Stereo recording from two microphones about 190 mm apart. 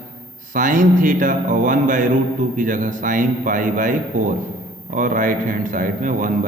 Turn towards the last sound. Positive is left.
turn(degrees=-45)  # may be behind; listen again after turning